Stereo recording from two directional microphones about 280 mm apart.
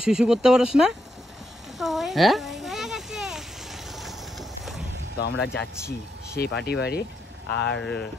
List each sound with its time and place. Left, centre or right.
0.0 s speech: centre
1.8 s a sound: centre
5.2 s speech: left
7.8 s speech: centre